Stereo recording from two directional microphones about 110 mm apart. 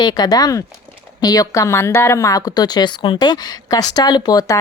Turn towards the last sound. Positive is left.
turn(degrees=35)  # may be behind; listen again after turning